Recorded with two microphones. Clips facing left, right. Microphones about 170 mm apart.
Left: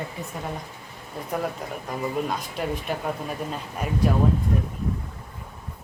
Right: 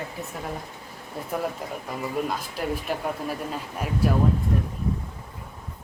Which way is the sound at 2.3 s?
Centre (ahead or behind).